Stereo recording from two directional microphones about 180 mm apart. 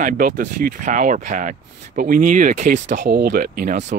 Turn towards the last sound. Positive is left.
turn(degrees=-45)  # may be behind; listen again after turning